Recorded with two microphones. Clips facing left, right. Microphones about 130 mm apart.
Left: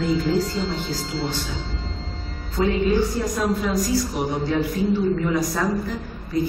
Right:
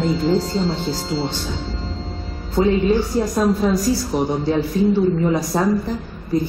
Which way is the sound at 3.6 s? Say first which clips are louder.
Right 4 dB; 30° right (ahead or behind).